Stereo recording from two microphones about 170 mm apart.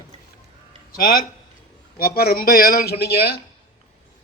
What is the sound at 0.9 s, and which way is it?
A man's voice, 55° left (ahead or behind).